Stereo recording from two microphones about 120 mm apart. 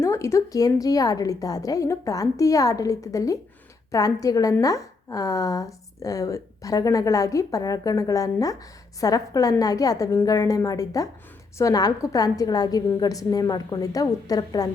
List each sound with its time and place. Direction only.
0.0 s a woman's voice: 25° left (ahead or behind)